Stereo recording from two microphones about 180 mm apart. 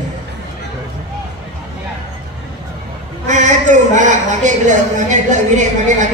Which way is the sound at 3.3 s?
45° right (ahead or behind).